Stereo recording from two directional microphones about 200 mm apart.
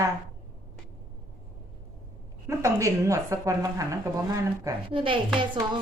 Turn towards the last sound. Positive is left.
turn(degrees=-25)  # may be behind; listen again after turning